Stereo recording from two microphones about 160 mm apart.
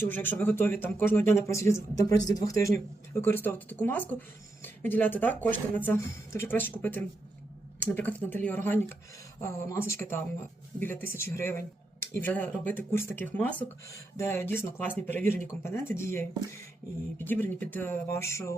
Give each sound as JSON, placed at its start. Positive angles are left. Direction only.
{"t": 0.0, "sound": "speech", "side_deg": 10}